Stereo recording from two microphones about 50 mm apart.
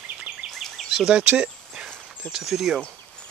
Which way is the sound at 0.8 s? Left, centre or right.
Centre.